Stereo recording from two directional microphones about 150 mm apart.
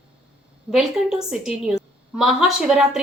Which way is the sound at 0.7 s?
Centre (ahead or behind).